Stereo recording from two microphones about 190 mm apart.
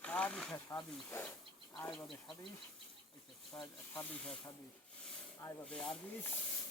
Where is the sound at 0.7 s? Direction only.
15° left (ahead or behind).